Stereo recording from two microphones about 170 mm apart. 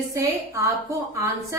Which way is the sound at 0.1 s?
20° right (ahead or behind).